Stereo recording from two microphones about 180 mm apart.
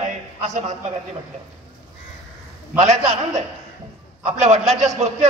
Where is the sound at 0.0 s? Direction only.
40° right (ahead or behind).